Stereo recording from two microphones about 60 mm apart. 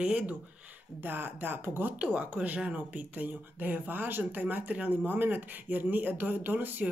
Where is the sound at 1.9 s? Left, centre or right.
Right.